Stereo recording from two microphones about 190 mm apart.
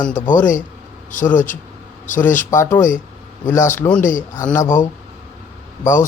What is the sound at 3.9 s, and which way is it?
Speech, 45° left (ahead or behind).